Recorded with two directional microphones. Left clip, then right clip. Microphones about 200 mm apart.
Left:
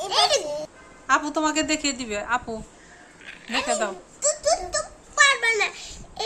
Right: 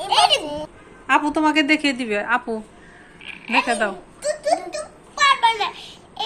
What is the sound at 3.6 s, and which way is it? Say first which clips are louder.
Speech: right 4 dB; centre (ahead or behind).